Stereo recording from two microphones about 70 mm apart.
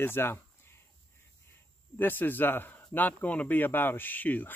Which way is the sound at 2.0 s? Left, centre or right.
Left.